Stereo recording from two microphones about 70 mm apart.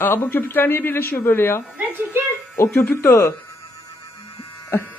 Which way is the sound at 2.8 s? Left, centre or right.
Left.